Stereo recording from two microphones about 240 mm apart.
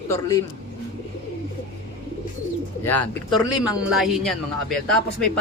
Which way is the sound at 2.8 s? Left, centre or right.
Centre.